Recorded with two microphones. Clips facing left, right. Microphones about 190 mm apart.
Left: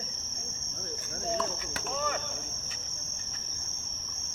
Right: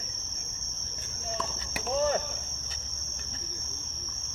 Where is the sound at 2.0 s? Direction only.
35° right (ahead or behind).